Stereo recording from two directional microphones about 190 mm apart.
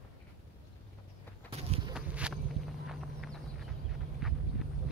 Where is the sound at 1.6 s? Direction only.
35° right (ahead or behind).